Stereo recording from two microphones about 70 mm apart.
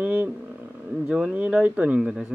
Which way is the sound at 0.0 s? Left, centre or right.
Right.